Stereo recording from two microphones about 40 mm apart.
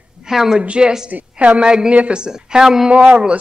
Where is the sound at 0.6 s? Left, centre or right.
Right.